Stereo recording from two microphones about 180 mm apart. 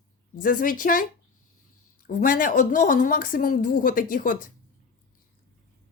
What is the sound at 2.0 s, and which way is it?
A woman's voice, 50° left (ahead or behind).